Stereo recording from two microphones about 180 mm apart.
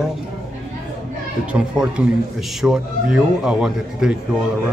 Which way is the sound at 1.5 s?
5° right (ahead or behind).